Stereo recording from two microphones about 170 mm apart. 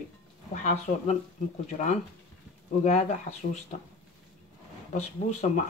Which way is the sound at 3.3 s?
45° left (ahead or behind).